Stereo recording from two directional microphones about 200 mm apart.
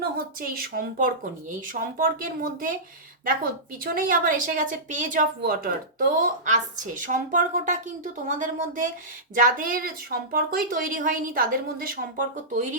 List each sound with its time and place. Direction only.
0.0 s speech: 45° right (ahead or behind)
3.9 s a woman's voice: 45° right (ahead or behind)